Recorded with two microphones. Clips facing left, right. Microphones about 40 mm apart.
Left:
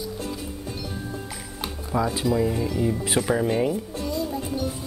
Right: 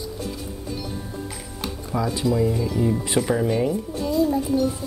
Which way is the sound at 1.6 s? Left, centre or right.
Centre.